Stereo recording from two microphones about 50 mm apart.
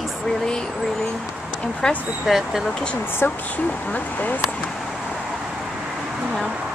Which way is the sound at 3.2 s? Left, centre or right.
Left.